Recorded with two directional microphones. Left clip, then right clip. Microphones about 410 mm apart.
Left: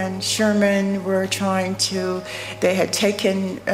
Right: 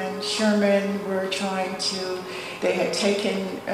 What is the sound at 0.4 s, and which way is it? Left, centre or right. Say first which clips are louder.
A woman's voice: left 2 dB; left.